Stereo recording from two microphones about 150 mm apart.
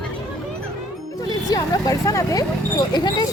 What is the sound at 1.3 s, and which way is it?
Vehicle, 25° left (ahead or behind).